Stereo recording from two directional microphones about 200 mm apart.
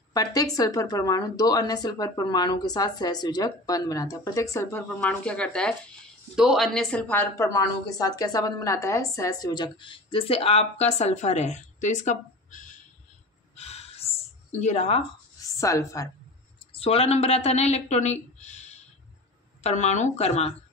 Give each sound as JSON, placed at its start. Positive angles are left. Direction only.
{"t": 0.1, "sound": "speech", "side_deg": 20}
{"t": 13.6, "sound": "a sound", "side_deg": 30}
{"t": 15.4, "sound": "a woman's voice", "side_deg": 15}
{"t": 16.7, "sound": "speech", "side_deg": 30}
{"t": 19.6, "sound": "speech", "side_deg": 35}